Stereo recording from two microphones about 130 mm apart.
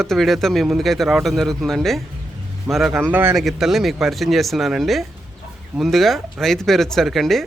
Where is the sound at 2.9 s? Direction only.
15° right (ahead or behind).